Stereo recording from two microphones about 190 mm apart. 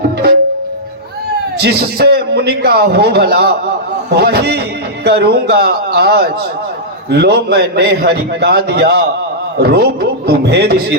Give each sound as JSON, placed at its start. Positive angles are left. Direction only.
{"t": 1.5, "sound": "a man's voice", "side_deg": -60}